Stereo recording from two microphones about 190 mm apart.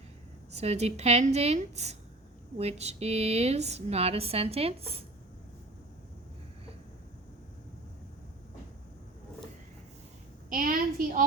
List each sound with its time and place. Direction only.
0.5 s speech: 35° right (ahead or behind)
10.5 s a woman's voice: 45° right (ahead or behind)